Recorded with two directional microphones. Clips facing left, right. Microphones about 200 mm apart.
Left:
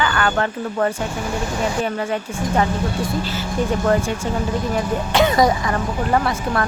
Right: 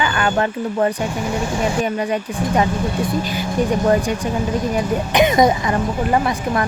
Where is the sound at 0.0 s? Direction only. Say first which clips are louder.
Right 1 dB; 20° right (ahead or behind).